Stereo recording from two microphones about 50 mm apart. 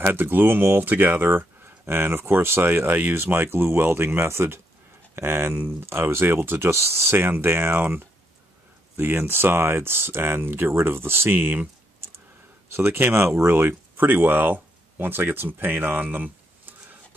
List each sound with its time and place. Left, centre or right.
0.0 s speech: right
5.1 s speech: right
12.7 s speech: right
13.0 s speech: right